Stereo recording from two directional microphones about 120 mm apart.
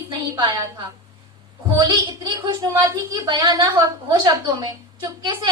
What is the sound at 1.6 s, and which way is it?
A woman's voice, 40° right (ahead or behind).